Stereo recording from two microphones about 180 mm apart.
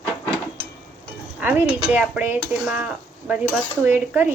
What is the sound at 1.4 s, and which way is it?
Dishes, 10° right (ahead or behind).